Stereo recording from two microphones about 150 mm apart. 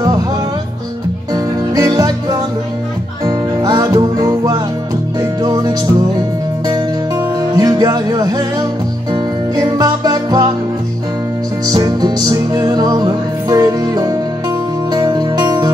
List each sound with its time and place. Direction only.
1.3 s music: 25° right (ahead or behind)
11.6 s music: 25° right (ahead or behind)